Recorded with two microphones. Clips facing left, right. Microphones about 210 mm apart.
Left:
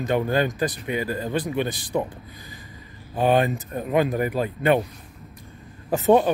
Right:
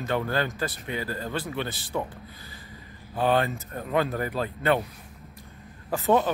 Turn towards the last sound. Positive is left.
turn(degrees=20)  # may be behind; listen again after turning